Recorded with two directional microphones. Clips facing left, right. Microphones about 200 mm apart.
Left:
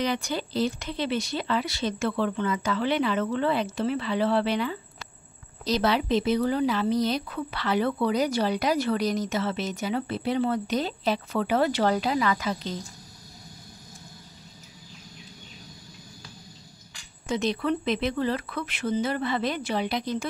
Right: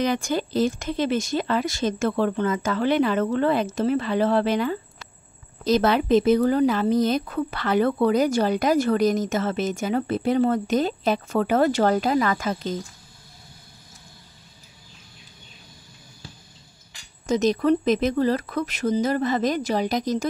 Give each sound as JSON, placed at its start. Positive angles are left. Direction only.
{"t": 0.0, "sound": "a woman's voice", "side_deg": -45}
{"t": 17.3, "sound": "speech", "side_deg": -40}